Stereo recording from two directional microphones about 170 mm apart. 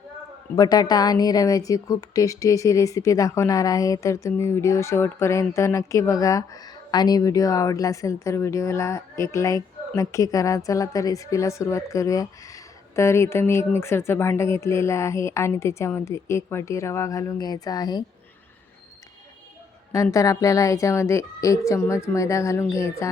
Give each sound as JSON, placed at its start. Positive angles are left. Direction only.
{"t": 0.5, "sound": "speech", "side_deg": 20}
{"t": 19.9, "sound": "speech", "side_deg": 20}